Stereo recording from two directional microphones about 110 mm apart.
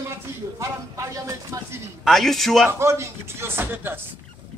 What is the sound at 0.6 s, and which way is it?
Speech, 25° right (ahead or behind).